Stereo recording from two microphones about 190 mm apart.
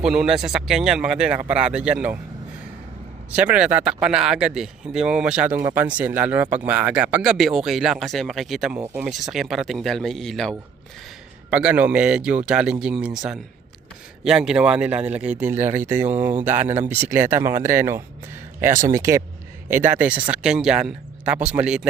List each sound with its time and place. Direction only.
0.0 s speech: 5° right (ahead or behind)
3.3 s speech: 5° right (ahead or behind)
11.5 s speech: 10° right (ahead or behind)